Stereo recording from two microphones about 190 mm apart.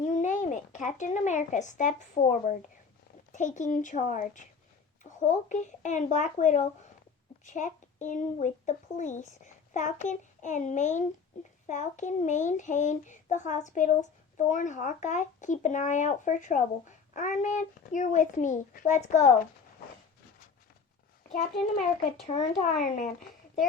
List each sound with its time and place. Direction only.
0.0 s a child's voice: 40° left (ahead or behind)
22.3 s a child's voice: 30° left (ahead or behind)
22.6 s speech: 40° left (ahead or behind)